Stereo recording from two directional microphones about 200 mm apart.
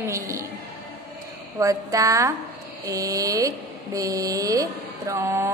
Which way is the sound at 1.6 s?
15° right (ahead or behind).